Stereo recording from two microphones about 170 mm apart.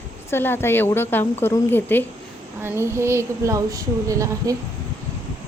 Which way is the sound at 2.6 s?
15° right (ahead or behind).